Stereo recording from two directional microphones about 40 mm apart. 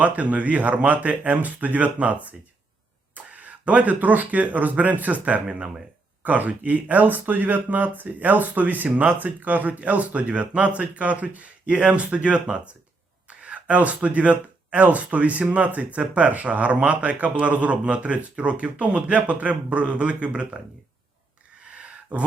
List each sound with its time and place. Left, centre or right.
0.0 s speech: right
5.5 s speech: right
6.2 s speech: right